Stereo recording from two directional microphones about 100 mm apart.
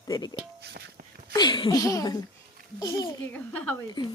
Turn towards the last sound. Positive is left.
turn(degrees=15)  # may be behind; listen again after turning